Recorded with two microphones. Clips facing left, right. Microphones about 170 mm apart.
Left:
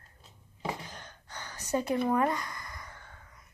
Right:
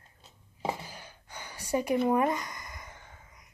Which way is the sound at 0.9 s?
10° right (ahead or behind).